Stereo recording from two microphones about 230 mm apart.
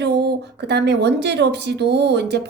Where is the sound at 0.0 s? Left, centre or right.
Right.